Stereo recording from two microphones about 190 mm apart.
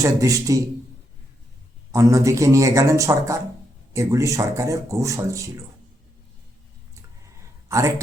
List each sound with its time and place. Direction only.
0.0 s speech: 15° right (ahead or behind)
1.9 s speech: 15° right (ahead or behind)
7.7 s speech: 15° right (ahead or behind)